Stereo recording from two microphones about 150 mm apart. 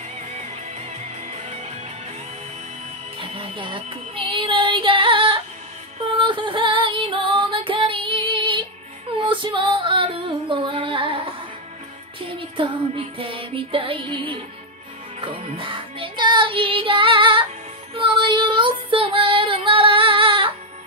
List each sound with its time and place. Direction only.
1.0 s music: 45° right (ahead or behind)
3.2 s music: 35° right (ahead or behind)
17.9 s child singing: 35° right (ahead or behind)